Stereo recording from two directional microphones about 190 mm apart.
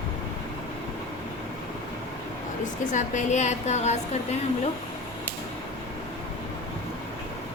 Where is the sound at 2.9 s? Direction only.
40° left (ahead or behind).